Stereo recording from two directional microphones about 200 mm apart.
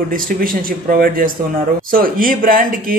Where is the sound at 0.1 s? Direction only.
45° right (ahead or behind).